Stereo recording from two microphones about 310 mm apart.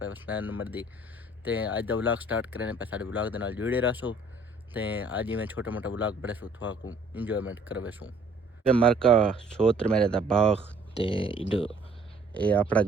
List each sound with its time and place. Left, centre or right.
0.0 s speech: centre
10.9 s speech: centre
12.3 s speech: centre